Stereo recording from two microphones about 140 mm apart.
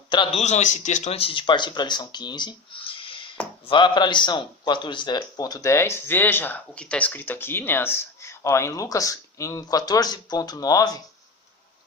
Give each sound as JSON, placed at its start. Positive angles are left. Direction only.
{"t": 0.1, "sound": "a man's voice", "side_deg": 35}
{"t": 0.3, "sound": "a man's voice", "side_deg": 55}